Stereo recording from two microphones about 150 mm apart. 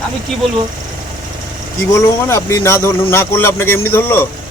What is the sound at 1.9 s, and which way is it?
A man's voice, 20° left (ahead or behind).